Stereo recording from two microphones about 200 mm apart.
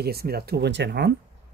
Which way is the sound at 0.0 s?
50° right (ahead or behind).